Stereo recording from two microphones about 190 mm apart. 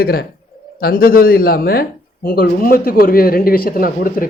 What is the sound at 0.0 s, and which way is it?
A man's voice, 55° left (ahead or behind).